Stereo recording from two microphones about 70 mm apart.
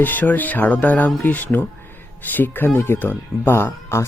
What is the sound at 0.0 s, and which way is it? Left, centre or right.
Speech, left.